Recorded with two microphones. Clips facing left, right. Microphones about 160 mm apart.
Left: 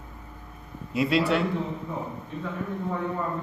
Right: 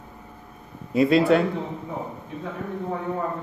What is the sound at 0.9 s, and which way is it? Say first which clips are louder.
Speech: right 6 dB; 45° right (ahead or behind).